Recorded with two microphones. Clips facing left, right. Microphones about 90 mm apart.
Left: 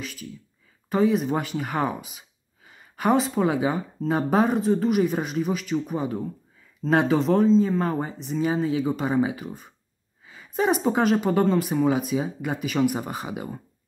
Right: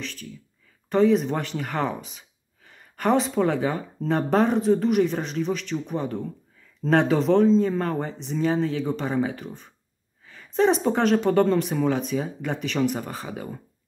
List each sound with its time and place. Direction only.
0.0 s speech: 10° left (ahead or behind)